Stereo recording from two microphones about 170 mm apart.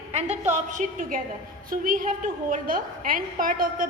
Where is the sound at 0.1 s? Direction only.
40° right (ahead or behind).